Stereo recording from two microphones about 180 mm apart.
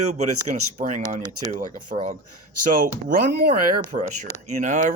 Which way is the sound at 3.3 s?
55° right (ahead or behind).